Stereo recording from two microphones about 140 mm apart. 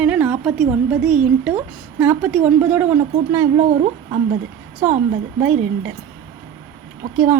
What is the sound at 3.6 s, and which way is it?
Speech, 60° right (ahead or behind).